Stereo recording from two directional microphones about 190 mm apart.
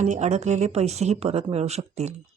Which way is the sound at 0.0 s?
40° right (ahead or behind).